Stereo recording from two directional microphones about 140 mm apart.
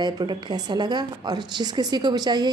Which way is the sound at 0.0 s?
30° right (ahead or behind).